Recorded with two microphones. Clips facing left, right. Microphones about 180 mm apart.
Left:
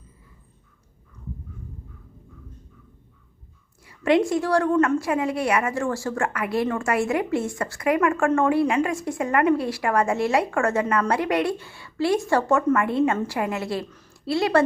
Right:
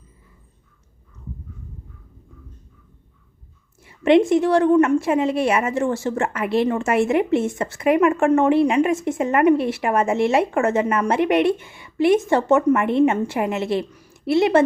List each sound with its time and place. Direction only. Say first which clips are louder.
3.8 s a woman's voice: right 5 dB; 25° right (ahead or behind)
13.9 s a sound: right 3 dB; 10° right (ahead or behind)
14.3 s a woman's voice: right 4 dB; 20° right (ahead or behind)